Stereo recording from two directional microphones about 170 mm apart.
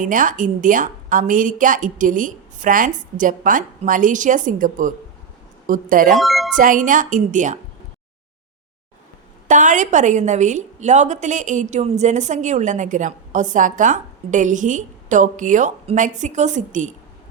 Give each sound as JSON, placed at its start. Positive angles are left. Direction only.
{"t": 0.0, "sound": "a woman's voice", "side_deg": -50}
{"t": 6.1, "sound": "speech", "side_deg": 0}
{"t": 6.6, "sound": "a woman's voice", "side_deg": -50}
{"t": 9.5, "sound": "a woman's voice", "side_deg": -45}